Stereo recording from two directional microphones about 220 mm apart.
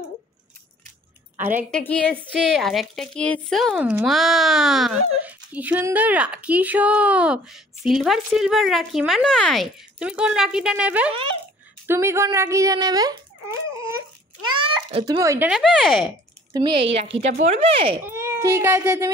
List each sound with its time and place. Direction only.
1.7 s a woman's voice: 5° left (ahead or behind); by 13.6 s 15° right (ahead or behind)
14.5 s a sound: 25° right (ahead or behind)
15.2 s a woman's voice: 10° right (ahead or behind)
16.5 s speech: 20° right (ahead or behind)
18.0 s a child's voice: 10° right (ahead or behind)